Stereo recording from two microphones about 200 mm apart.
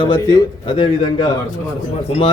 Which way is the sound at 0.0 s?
20° left (ahead or behind).